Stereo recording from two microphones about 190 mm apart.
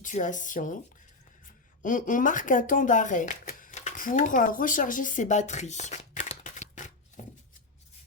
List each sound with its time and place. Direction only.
0.0 s speech: 40° left (ahead or behind)
1.8 s speech: 45° left (ahead or behind)
7.2 s a sound: 40° left (ahead or behind)